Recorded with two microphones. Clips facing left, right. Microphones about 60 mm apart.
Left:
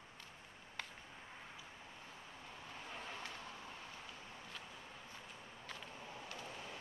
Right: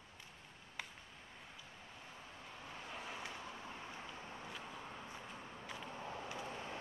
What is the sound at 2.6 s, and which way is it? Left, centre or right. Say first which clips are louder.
Vehicle: right 1 dB; centre.